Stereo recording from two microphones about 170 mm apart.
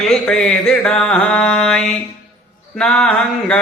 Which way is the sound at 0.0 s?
5° left (ahead or behind).